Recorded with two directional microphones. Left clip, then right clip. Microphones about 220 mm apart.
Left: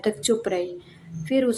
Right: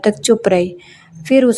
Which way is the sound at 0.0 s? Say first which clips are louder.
Right 10 dB; 35° right (ahead or behind).